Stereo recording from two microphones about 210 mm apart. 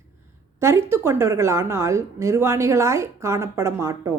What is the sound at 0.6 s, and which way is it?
A woman's voice, 10° right (ahead or behind).